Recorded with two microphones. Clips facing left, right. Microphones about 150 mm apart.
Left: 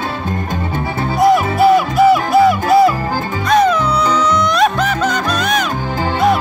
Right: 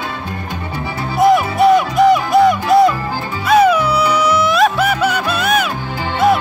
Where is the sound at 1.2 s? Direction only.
Centre (ahead or behind).